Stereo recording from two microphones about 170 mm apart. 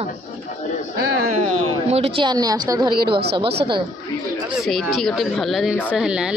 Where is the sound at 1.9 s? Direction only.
35° right (ahead or behind).